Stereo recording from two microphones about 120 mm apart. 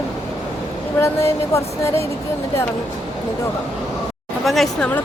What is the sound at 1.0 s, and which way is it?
Speech, 25° left (ahead or behind).